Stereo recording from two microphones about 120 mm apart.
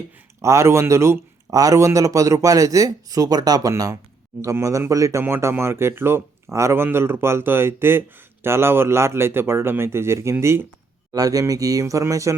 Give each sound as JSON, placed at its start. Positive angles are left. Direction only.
{"t": 0.4, "sound": "speech", "side_deg": -25}
{"t": 11.1, "sound": "speech", "side_deg": -30}